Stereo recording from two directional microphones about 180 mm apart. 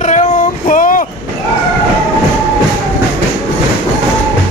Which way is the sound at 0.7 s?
50° left (ahead or behind).